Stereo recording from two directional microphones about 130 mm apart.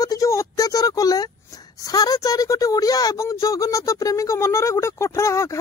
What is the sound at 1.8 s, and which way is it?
Speech, 30° left (ahead or behind).